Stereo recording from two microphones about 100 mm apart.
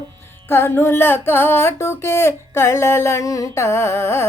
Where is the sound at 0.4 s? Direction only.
25° left (ahead or behind).